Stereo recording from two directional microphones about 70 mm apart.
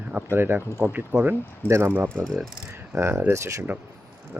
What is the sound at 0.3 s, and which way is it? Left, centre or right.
Speech, right.